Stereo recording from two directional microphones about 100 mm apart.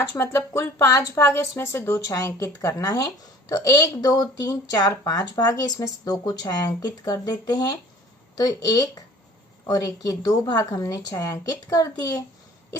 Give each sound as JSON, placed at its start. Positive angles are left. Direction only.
{"t": 0.0, "sound": "speech", "side_deg": 25}